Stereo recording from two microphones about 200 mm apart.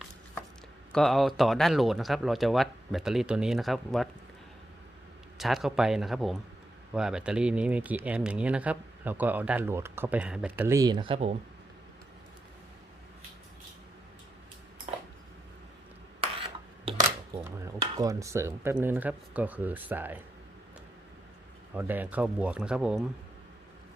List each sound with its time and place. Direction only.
0.9 s speech: centre (ahead or behind)
5.4 s speech: centre (ahead or behind); by 11.3 s 30° right (ahead or behind)
16.2 s a sound: 30° right (ahead or behind)
18.0 s speech: 15° right (ahead or behind)
21.8 s speech: 10° right (ahead or behind)